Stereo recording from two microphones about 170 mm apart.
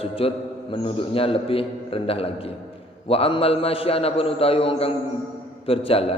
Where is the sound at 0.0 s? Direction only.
35° left (ahead or behind).